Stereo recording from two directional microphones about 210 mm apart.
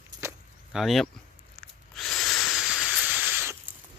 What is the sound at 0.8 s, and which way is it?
Speech, centre (ahead or behind).